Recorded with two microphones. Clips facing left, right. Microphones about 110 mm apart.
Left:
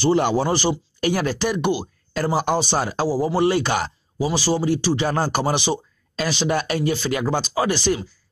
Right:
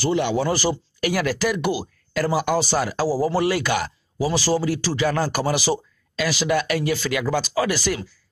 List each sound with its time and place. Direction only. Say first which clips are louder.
0.0 s speech: left 3 dB; 35° left (ahead or behind)